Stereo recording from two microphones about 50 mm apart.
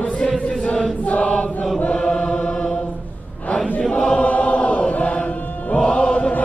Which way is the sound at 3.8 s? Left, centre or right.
Left.